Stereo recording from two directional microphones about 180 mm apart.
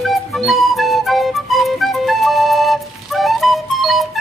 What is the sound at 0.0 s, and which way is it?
Music, centre (ahead or behind).